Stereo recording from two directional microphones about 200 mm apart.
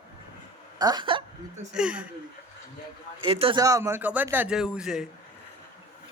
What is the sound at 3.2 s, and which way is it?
Speech, 30° right (ahead or behind).